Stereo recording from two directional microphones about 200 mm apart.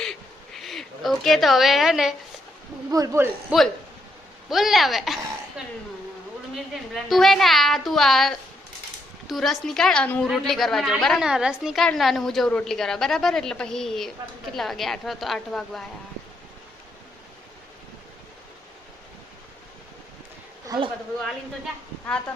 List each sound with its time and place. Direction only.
0.0 s a sound: centre (ahead or behind)
2.9 s a man's voice: 15° right (ahead or behind)
3.5 s a woman's voice: 5° right (ahead or behind)
6.9 s a woman's voice: centre (ahead or behind)
20.7 s speech: 25° right (ahead or behind)